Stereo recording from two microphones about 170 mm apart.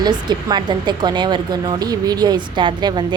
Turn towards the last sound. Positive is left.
turn(degrees=-25)  # may be behind; listen again after turning